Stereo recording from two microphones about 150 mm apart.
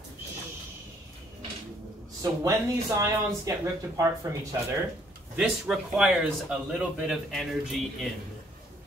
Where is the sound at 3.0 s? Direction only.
20° right (ahead or behind).